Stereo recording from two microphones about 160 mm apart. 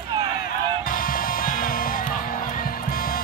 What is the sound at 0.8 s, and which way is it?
Music, 60° left (ahead or behind).